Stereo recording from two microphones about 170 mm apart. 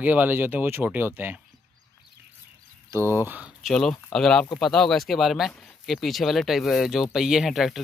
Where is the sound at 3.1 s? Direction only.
10° right (ahead or behind).